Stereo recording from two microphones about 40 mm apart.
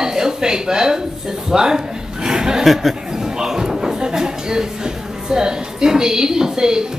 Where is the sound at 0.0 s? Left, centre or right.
Centre.